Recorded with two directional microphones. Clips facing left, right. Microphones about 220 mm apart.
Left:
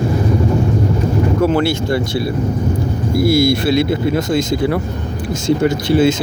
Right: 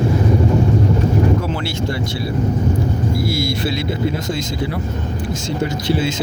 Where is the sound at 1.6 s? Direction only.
55° left (ahead or behind).